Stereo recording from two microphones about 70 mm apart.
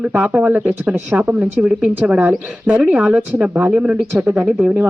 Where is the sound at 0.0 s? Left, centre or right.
Centre.